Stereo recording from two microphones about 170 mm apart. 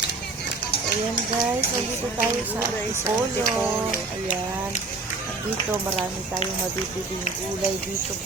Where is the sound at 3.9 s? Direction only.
50° left (ahead or behind).